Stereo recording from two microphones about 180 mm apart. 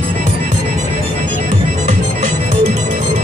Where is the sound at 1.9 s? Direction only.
45° right (ahead or behind).